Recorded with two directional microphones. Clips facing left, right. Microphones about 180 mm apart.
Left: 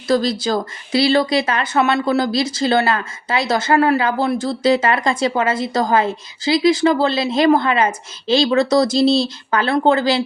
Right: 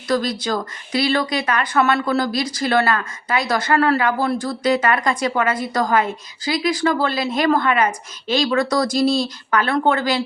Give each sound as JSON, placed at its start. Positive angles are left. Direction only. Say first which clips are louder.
{"t": 0.1, "sound": "speech", "louder": "left 3 dB", "side_deg": 25}